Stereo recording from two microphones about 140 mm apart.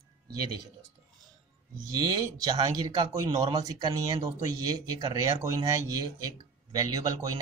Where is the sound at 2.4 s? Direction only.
30° right (ahead or behind).